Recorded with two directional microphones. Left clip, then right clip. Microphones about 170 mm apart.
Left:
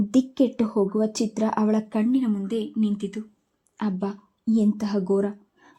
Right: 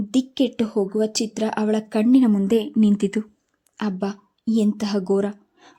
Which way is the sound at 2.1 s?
35° right (ahead or behind).